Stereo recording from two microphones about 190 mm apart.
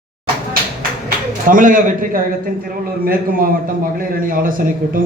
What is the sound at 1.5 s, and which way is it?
Speech, 45° right (ahead or behind).